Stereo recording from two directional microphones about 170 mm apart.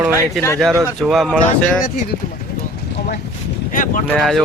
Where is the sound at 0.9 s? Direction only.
Centre (ahead or behind).